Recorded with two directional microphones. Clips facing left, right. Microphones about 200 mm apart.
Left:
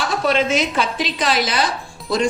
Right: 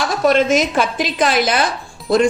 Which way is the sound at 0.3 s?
45° right (ahead or behind).